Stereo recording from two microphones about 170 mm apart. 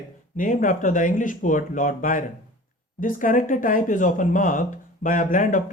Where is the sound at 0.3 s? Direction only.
50° left (ahead or behind).